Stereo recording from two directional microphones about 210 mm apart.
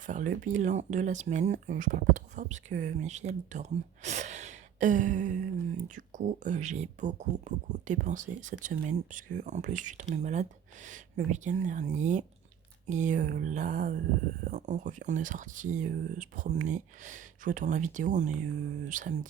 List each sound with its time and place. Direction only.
0.0 s speech: 40° right (ahead or behind)